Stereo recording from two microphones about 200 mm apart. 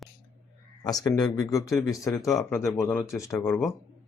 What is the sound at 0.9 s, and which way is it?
Speech, 20° left (ahead or behind).